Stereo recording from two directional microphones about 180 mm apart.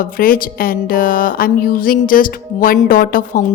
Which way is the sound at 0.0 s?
50° left (ahead or behind).